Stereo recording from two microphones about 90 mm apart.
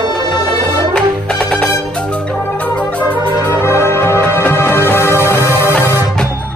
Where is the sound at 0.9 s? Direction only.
10° left (ahead or behind).